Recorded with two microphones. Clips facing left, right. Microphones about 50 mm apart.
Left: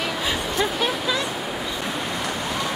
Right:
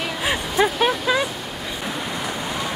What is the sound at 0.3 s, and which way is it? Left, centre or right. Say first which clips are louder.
Vehicle: right 6 dB; centre.